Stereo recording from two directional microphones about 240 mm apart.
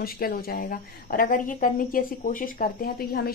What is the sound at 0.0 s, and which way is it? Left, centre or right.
Speech, left.